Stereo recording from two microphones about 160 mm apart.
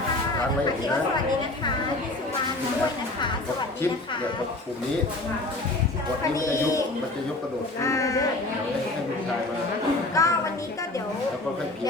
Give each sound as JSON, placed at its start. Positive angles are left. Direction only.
{"t": 6.3, "sound": "speech", "side_deg": 20}
{"t": 10.2, "sound": "speech", "side_deg": 20}